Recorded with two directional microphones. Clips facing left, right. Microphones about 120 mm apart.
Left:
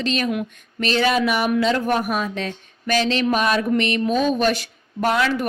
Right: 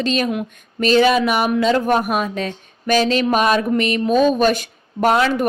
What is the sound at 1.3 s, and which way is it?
Speech, 50° right (ahead or behind).